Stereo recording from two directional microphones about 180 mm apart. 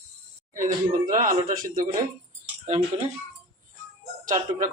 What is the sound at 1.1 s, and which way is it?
Speech, 45° right (ahead or behind).